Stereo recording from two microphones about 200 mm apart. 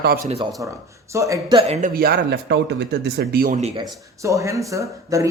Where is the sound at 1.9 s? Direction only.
50° right (ahead or behind).